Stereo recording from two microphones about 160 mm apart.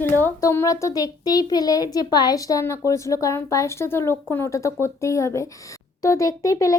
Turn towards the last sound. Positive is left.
turn(degrees=20)  # may be behind; listen again after turning